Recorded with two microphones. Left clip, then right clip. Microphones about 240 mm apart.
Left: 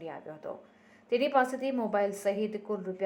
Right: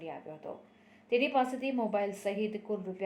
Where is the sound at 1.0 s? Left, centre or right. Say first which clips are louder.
Left 2 dB; centre.